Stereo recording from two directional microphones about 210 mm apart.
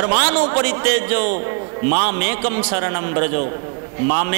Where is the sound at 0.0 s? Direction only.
25° right (ahead or behind).